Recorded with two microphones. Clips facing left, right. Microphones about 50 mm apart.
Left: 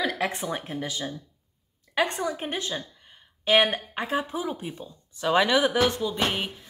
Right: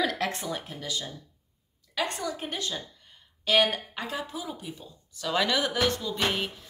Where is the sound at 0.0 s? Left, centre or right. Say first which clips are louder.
Left 1 dB; centre.